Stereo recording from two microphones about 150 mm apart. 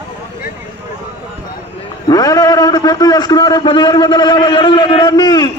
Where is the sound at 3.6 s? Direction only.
30° left (ahead or behind).